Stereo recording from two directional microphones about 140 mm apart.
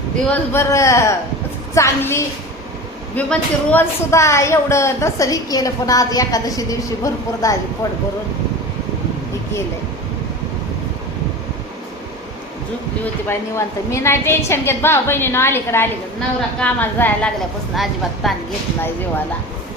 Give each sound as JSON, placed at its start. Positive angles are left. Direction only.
{"t": 0.3, "sound": "a woman's voice", "side_deg": 20}
{"t": 13.2, "sound": "a woman's voice", "side_deg": 20}
{"t": 17.7, "sound": "a woman's voice", "side_deg": 0}